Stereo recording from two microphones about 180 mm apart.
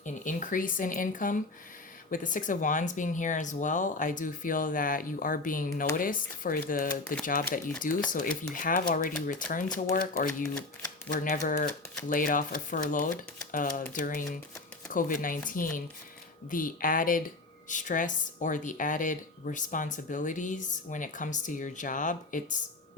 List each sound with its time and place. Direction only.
0.0 s speech: 45° left (ahead or behind)